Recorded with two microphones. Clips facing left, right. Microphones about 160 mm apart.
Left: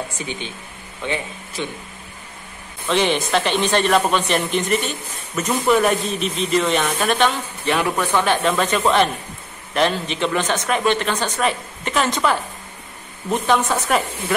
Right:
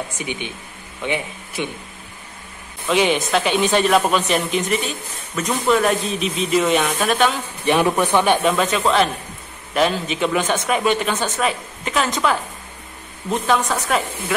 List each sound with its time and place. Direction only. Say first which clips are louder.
0.2 s speech: right 1 dB; 15° right (ahead or behind)
2.9 s speech: right 1 dB; 5° right (ahead or behind)
7.6 s speech: right 4 dB; 20° right (ahead or behind)
8.4 s speech: right 1 dB; 5° right (ahead or behind)
13.3 s speech: left 1 dB; 5° left (ahead or behind)